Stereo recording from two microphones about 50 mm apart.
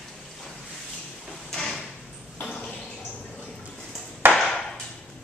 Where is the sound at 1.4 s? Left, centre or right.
Centre.